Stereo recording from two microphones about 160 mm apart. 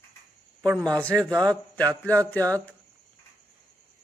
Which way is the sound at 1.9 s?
10° left (ahead or behind).